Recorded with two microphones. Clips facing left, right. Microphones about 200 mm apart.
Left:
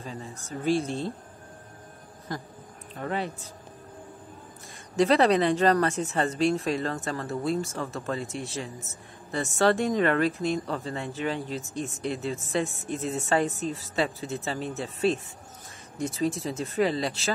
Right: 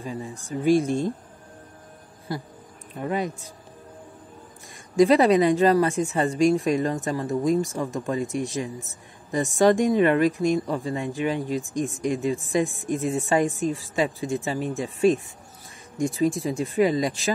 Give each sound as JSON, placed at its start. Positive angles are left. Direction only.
{"t": 0.0, "sound": "a woman's voice", "side_deg": -15}
{"t": 2.3, "sound": "a woman's voice", "side_deg": -10}
{"t": 4.9, "sound": "a woman's voice", "side_deg": -15}